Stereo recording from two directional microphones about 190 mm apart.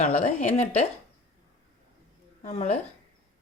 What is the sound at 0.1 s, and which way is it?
Speech, 35° left (ahead or behind).